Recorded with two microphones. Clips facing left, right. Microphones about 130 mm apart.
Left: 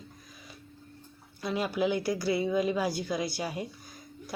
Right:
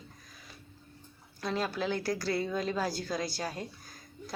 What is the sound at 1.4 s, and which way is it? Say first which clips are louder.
Speech: left 3 dB; 10° left (ahead or behind).